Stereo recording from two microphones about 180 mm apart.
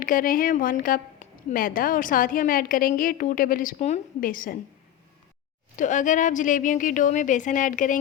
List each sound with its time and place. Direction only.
0.0 s a woman's voice: 50° left (ahead or behind)
5.7 s a woman's voice: 45° left (ahead or behind)